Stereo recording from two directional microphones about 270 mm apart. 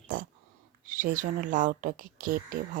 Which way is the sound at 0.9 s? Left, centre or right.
Right.